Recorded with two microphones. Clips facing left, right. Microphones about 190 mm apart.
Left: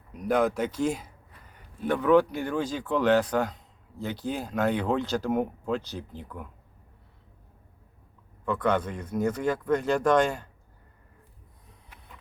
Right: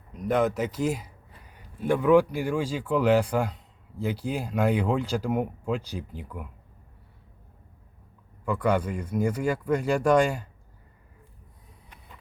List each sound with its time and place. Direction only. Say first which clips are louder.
0.1 s speech: even; centre (ahead or behind)
8.4 s speech: right 1 dB; 10° right (ahead or behind)